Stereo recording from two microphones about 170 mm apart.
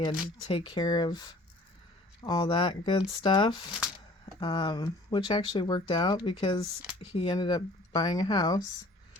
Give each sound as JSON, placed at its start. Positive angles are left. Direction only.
{"t": 0.0, "sound": "speech", "side_deg": 30}